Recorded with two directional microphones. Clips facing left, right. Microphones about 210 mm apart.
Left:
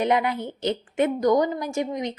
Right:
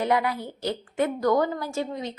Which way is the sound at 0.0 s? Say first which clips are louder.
Left 2 dB; 20° left (ahead or behind).